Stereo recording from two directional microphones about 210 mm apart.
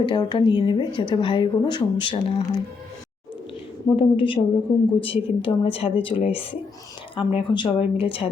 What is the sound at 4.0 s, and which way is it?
Speech, 25° left (ahead or behind).